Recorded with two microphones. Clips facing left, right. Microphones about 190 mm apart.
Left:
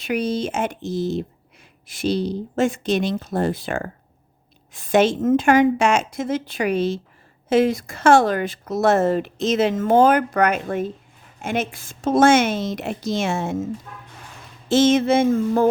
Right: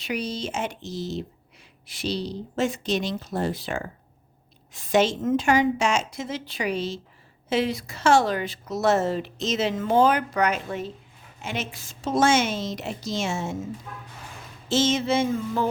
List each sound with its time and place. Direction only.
0.0 s a woman's voice: 55° left (ahead or behind)
14.7 s speech: 55° left (ahead or behind)